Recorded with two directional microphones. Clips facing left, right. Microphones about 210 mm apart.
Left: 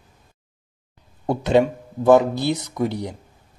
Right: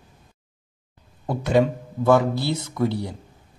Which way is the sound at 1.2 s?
25° left (ahead or behind).